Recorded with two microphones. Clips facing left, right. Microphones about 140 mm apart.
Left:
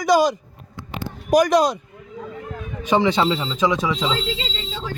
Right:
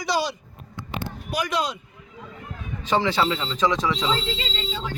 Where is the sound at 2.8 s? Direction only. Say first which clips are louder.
Left 4 dB; 15° left (ahead or behind).